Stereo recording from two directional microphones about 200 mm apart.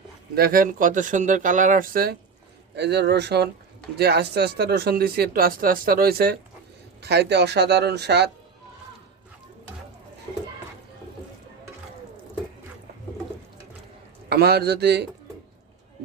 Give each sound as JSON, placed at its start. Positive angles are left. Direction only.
{"t": 0.3, "sound": "speech", "side_deg": -45}
{"t": 2.7, "sound": "speech", "side_deg": -55}
{"t": 14.3, "sound": "speech", "side_deg": -50}